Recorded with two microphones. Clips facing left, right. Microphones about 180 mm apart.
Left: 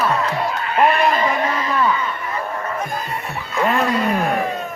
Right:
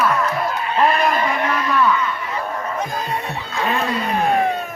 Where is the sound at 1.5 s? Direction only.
65° right (ahead or behind).